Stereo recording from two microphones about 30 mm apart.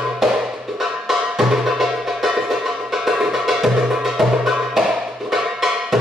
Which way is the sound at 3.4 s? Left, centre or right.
Centre.